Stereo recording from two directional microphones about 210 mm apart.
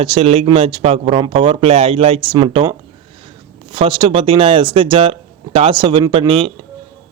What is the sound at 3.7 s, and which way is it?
A man's voice, 25° right (ahead or behind).